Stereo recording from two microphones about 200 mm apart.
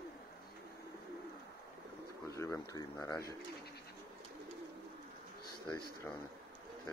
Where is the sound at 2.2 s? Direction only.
15° left (ahead or behind).